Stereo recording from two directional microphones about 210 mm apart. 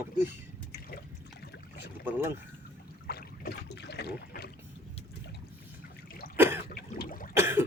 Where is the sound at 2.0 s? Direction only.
10° right (ahead or behind).